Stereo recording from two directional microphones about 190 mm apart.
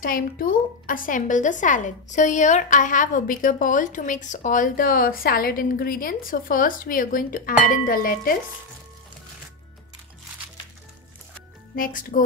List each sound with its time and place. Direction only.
0.0 s a woman's voice: 45° left (ahead or behind)
11.7 s a woman's voice: 45° left (ahead or behind)